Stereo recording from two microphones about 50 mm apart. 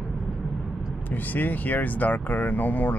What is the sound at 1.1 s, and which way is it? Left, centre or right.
Speech, left.